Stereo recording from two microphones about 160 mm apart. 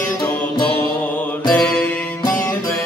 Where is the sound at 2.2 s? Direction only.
20° left (ahead or behind).